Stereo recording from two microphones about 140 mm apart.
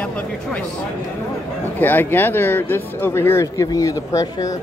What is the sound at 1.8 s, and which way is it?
Speech, 15° left (ahead or behind).